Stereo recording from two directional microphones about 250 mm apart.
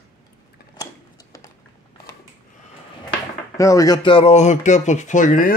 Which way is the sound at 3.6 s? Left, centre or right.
Centre.